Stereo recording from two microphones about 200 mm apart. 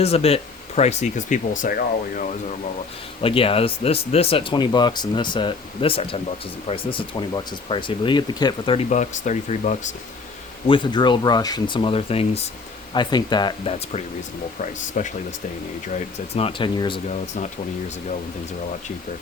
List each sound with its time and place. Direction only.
0.0 s speech: 30° left (ahead or behind)
3.2 s speech: 25° left (ahead or behind)
10.7 s speech: 20° left (ahead or behind)